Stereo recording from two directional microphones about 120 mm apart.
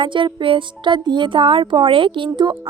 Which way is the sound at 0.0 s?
45° right (ahead or behind).